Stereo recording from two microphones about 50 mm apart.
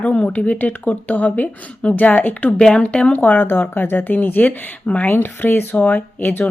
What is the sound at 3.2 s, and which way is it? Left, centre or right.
Speech, left.